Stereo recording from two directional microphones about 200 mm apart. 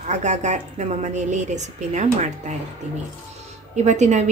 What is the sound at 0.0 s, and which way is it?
A woman's voice, 35° right (ahead or behind).